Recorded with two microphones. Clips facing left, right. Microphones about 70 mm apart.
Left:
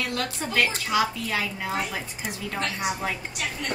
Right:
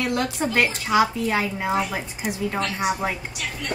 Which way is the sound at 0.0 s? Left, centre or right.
Right.